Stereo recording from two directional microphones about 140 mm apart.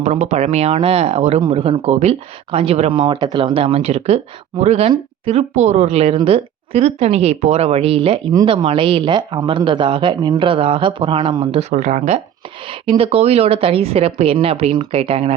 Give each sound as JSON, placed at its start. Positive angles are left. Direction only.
{"t": 0.0, "sound": "speech", "side_deg": -55}
{"t": 11.7, "sound": "speech", "side_deg": -60}
{"t": 12.6, "sound": "speech", "side_deg": -40}